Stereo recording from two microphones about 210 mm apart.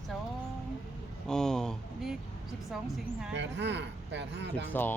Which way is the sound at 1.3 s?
5° left (ahead or behind).